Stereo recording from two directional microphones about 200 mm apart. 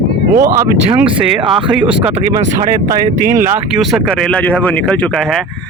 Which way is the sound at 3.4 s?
10° right (ahead or behind).